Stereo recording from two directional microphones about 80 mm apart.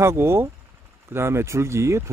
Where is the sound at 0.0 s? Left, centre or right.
Right.